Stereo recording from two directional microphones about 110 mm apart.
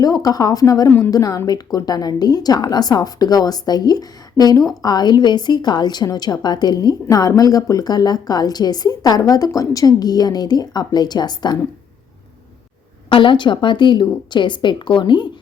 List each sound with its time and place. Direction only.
0.0 s a woman's voice: 35° left (ahead or behind)
0.9 s a woman's voice: 20° left (ahead or behind)
1.1 s a woman's voice: 35° left (ahead or behind)
13.1 s a woman's voice: 50° left (ahead or behind)